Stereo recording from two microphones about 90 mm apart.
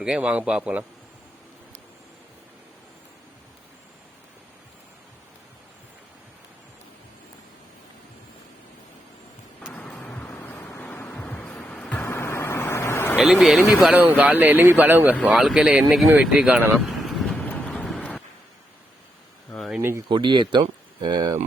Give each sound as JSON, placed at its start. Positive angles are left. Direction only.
{"t": 0.0, "sound": "speech", "side_deg": -10}
{"t": 9.6, "sound": "vehicle", "side_deg": 15}
{"t": 11.5, "sound": "music", "side_deg": 10}
{"t": 12.0, "sound": "vehicle", "side_deg": 30}
{"t": 13.1, "sound": "speech", "side_deg": -5}
{"t": 13.9, "sound": "speech", "side_deg": -15}
{"t": 15.2, "sound": "speech", "side_deg": -5}
{"t": 16.7, "sound": "vehicle", "side_deg": 0}
{"t": 17.3, "sound": "vehicle", "side_deg": 15}
{"t": 17.8, "sound": "a sound", "side_deg": 5}
{"t": 19.5, "sound": "a sound", "side_deg": 0}
{"t": 20.1, "sound": "speech", "side_deg": -60}